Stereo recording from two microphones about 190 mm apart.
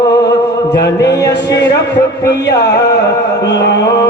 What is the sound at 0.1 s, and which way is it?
Mantra, 60° left (ahead or behind).